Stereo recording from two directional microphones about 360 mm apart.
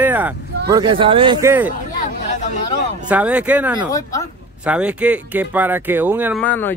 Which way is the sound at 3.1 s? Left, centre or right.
Centre.